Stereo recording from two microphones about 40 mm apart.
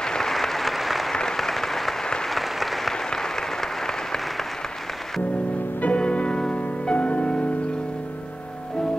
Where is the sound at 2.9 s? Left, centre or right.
Centre.